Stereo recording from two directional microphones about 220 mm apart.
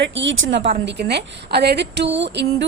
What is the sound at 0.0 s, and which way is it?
Speech, 55° right (ahead or behind).